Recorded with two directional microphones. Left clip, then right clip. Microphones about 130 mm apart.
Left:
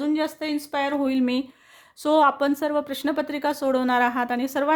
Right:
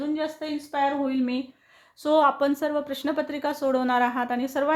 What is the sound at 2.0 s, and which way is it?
Speech, 40° left (ahead or behind).